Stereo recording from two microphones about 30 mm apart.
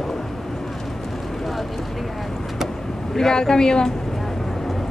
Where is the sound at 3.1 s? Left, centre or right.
Left.